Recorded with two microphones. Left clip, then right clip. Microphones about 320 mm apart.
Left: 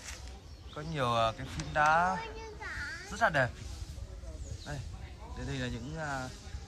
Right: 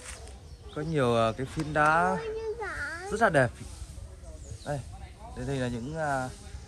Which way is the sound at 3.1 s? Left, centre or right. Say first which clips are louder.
Right 5 dB; centre.